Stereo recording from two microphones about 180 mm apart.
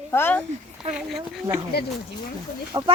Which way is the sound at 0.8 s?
Centre (ahead or behind).